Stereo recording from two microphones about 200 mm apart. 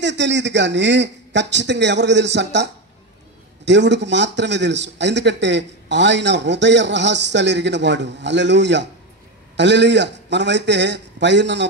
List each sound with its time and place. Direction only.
0.0 s a man's voice: 60° right (ahead or behind)